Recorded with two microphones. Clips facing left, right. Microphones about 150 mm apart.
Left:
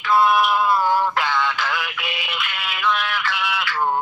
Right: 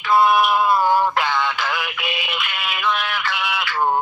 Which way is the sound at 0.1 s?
15° right (ahead or behind).